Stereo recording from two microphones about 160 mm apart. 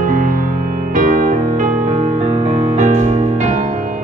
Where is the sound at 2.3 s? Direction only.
40° right (ahead or behind).